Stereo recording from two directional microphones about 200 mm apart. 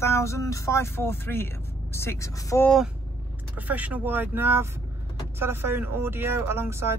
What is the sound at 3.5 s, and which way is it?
Speech, 10° right (ahead or behind).